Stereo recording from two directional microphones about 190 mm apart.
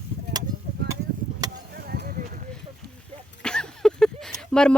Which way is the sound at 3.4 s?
5° left (ahead or behind).